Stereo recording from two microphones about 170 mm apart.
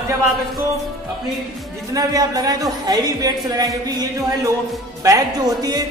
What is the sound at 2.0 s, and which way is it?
A man's voice, 20° right (ahead or behind).